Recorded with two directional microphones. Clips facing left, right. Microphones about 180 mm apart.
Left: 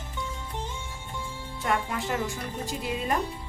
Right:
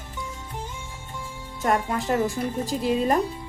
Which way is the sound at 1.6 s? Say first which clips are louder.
Right 5 dB; 40° right (ahead or behind).